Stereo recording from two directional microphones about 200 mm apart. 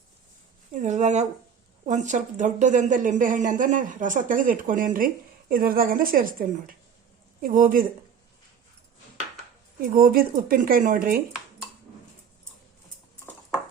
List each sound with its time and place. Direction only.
0.7 s a woman's voice: 40° right (ahead or behind)
9.8 s speech: 45° right (ahead or behind)